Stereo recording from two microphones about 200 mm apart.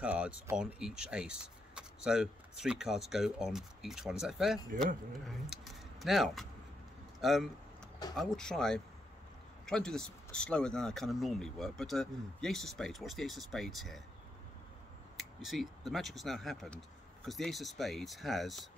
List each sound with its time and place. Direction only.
0.0 s speech: 5° right (ahead or behind)
15.1 s speech: centre (ahead or behind)